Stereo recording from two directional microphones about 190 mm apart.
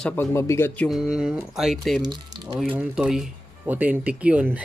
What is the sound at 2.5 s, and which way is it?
Speech, 5° right (ahead or behind).